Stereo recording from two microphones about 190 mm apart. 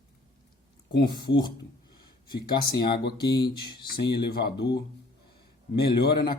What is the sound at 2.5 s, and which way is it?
Speech, 55° left (ahead or behind).